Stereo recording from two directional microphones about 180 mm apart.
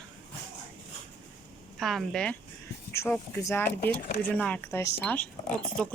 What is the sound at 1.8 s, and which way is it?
Speech, centre (ahead or behind).